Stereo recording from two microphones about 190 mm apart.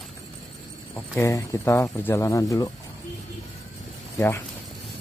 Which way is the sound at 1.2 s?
15° left (ahead or behind).